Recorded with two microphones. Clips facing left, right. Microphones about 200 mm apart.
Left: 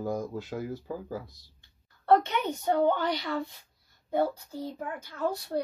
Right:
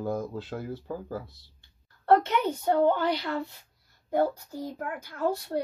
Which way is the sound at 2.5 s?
5° right (ahead or behind).